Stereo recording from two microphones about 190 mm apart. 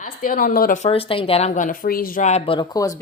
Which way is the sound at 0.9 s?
30° left (ahead or behind).